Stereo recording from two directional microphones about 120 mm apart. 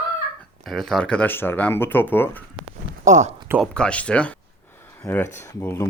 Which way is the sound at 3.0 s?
85° right.